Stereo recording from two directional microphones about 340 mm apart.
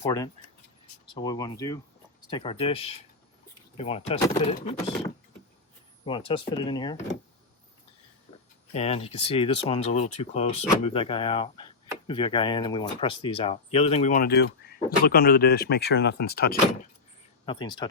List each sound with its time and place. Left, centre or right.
0.0 s speech: centre
8.7 s speech: centre
17.4 s speech: centre